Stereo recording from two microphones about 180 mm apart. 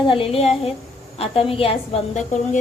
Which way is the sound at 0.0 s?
30° left (ahead or behind).